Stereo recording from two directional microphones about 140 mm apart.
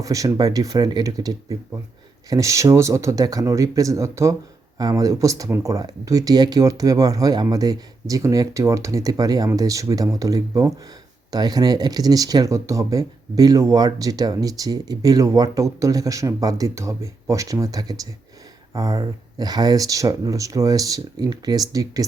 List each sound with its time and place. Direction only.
0.0 s speech: 25° right (ahead or behind)